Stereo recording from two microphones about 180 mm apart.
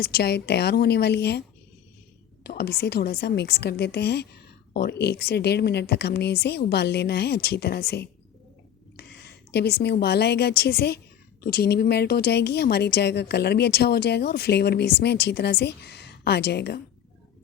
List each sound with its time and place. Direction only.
0.0 s a woman's voice: 60° left (ahead or behind)